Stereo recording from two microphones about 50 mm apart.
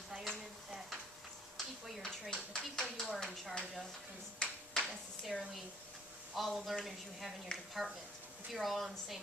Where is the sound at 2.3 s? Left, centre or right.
Centre.